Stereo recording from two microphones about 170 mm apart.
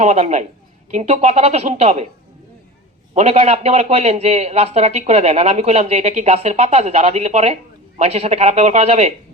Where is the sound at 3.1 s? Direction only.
40° right (ahead or behind).